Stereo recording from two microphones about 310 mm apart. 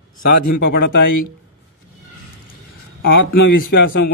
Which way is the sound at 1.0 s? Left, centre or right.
Left.